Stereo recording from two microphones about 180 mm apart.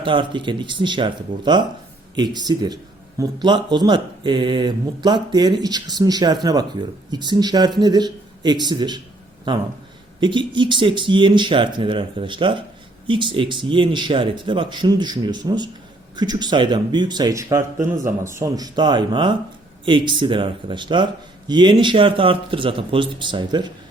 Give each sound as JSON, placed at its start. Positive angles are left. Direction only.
{"t": 0.0, "sound": "speech", "side_deg": -25}
{"t": 10.2, "sound": "speech", "side_deg": -25}